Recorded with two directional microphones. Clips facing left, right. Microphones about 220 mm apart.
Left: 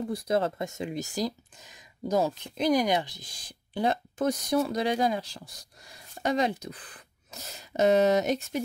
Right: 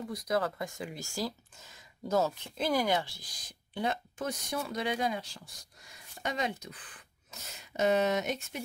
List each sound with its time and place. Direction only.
0.1 s speech: 30° left (ahead or behind)